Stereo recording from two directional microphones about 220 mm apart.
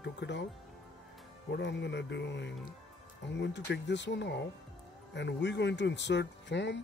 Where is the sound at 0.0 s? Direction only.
50° left (ahead or behind).